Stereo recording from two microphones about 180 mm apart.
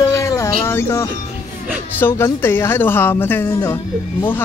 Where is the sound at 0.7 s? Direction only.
15° left (ahead or behind).